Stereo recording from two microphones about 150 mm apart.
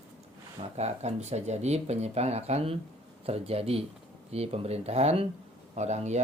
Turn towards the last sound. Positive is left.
turn(degrees=-50)  # may be behind; listen again after turning